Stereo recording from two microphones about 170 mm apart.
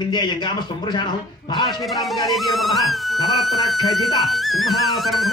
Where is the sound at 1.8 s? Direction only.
Centre (ahead or behind).